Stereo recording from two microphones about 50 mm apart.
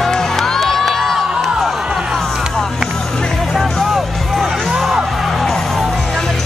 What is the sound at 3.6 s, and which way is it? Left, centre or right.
Music, centre.